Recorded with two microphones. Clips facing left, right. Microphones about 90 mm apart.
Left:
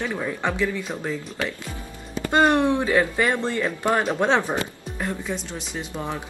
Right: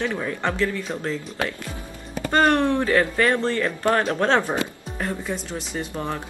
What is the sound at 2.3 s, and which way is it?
Speech, 10° left (ahead or behind).